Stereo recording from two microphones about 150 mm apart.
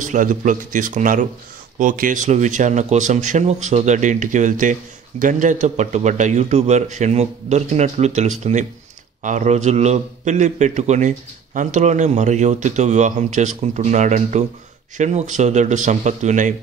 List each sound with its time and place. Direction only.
0.0 s a man's voice: 60° right (ahead or behind)